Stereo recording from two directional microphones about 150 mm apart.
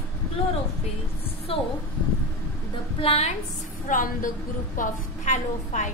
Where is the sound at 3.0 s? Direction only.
45° left (ahead or behind).